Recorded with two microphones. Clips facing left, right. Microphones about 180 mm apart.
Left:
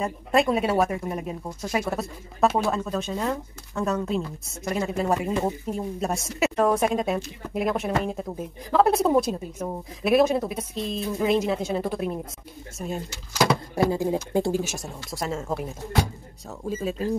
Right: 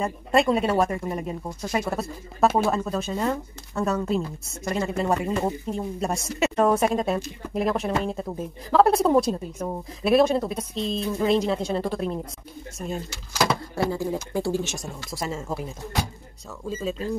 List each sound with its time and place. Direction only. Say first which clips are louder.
0.0 s speech: right 1 dB; centre (ahead or behind)
13.5 s shuffling cards: left 3 dB; 15° left (ahead or behind)
14.1 s speech: left 2 dB; 20° left (ahead or behind)
14.6 s speech: even; 5° left (ahead or behind)
16.6 s speech: left 1 dB; 10° left (ahead or behind)